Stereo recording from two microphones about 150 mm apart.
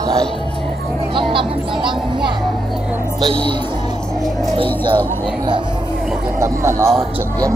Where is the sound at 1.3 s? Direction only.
35° right (ahead or behind).